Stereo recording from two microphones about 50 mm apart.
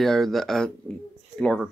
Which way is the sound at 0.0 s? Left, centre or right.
Centre.